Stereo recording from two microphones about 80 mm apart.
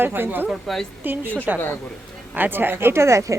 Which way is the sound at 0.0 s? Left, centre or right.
Right.